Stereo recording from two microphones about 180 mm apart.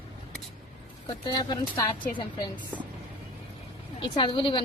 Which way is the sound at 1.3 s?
25° left (ahead or behind).